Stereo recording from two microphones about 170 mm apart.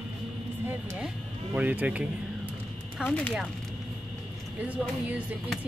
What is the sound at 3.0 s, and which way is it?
Speech, 10° left (ahead or behind).